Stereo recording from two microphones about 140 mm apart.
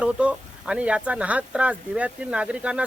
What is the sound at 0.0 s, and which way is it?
Speech, 10° right (ahead or behind).